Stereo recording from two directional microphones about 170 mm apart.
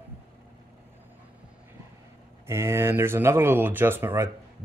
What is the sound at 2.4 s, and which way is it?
Speech, 15° right (ahead or behind).